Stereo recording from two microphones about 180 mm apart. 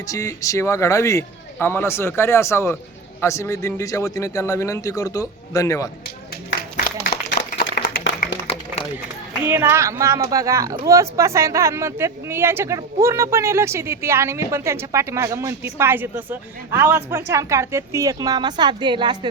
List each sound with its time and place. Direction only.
0.1 s speech: 20° left (ahead or behind)
6.6 s a sound: 55° left (ahead or behind)
9.4 s speech: 15° right (ahead or behind)